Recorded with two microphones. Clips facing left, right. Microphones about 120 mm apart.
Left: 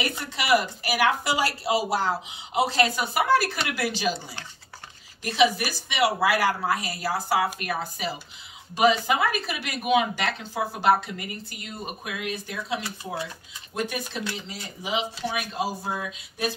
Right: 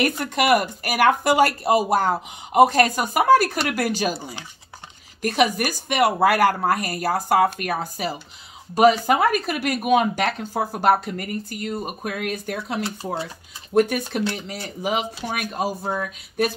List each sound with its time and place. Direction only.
0.2 s speech: 55° right (ahead or behind)
5.2 s speech: 50° right (ahead or behind)
12.8 s speech: 30° right (ahead or behind)
13.7 s speech: 50° right (ahead or behind)